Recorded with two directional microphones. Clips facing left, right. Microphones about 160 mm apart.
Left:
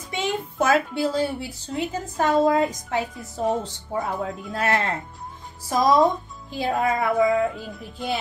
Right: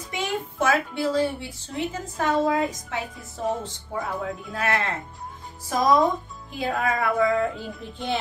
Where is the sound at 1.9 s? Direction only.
35° left (ahead or behind).